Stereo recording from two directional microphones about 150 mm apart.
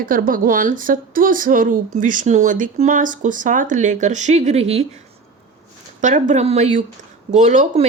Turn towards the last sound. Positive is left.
turn(degrees=-55)  # may be behind; listen again after turning